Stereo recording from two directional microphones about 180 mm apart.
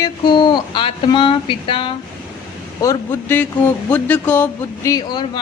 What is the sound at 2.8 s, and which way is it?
Speech, 15° left (ahead or behind).